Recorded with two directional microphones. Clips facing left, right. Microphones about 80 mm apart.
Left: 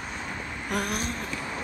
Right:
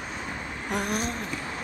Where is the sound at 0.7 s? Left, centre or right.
Right.